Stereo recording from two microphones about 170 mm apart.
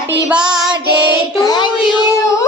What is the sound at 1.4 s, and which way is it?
Speech, 25° left (ahead or behind).